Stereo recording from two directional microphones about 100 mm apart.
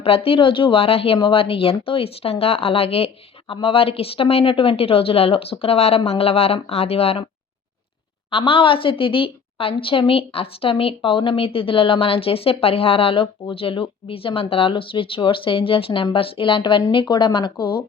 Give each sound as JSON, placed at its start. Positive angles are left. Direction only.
{"t": 0.0, "sound": "speech", "side_deg": 70}
{"t": 3.5, "sound": "speech", "side_deg": 65}
{"t": 8.3, "sound": "a woman's voice", "side_deg": 65}